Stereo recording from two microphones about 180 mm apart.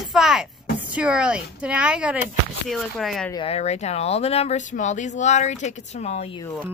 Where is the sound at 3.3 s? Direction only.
35° left (ahead or behind).